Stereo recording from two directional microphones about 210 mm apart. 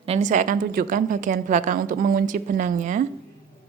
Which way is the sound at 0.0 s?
30° right (ahead or behind).